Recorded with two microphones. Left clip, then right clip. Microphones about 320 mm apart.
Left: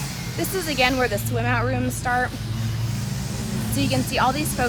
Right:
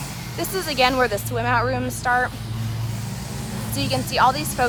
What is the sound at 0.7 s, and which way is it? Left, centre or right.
Speech, centre.